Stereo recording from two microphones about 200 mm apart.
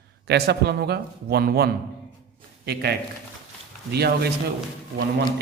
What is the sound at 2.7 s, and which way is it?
A man's voice, 55° right (ahead or behind).